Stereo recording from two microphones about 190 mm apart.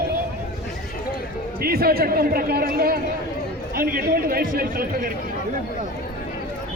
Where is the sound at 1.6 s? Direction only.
55° right (ahead or behind).